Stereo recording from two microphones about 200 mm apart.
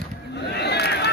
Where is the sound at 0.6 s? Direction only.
55° left (ahead or behind).